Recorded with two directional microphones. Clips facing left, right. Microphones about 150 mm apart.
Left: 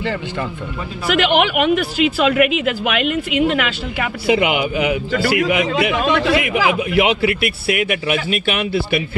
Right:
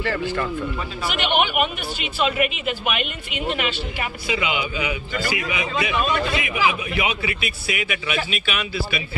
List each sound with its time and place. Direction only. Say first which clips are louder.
0.0 s speech: left 1 dB; 20° left (ahead or behind)
1.1 s speech: left 6 dB; 90° left; by 9.0 s 60° left (ahead or behind)